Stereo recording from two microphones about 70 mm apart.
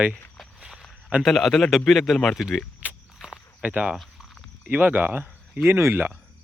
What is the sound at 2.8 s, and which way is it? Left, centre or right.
Walk, right.